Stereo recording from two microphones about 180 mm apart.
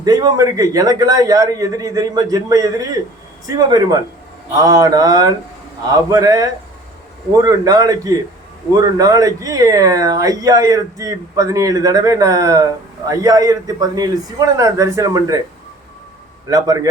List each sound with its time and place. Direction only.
0.0 s speech: 20° right (ahead or behind)
16.5 s speech: 20° right (ahead or behind)